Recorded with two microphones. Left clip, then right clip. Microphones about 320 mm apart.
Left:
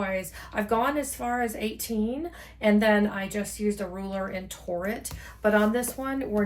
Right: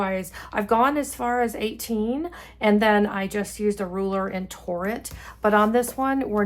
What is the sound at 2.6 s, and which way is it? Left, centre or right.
A woman's voice, centre.